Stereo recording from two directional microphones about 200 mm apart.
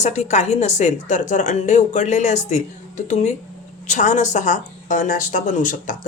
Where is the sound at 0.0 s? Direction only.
35° left (ahead or behind).